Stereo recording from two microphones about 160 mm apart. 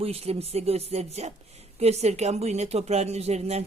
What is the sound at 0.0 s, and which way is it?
Speech, 40° right (ahead or behind).